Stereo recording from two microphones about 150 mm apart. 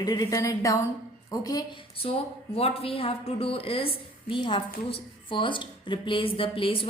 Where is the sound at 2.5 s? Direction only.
40° left (ahead or behind).